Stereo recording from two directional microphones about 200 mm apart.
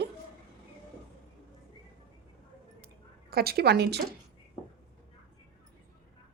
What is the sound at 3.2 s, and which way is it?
Speech, 50° right (ahead or behind).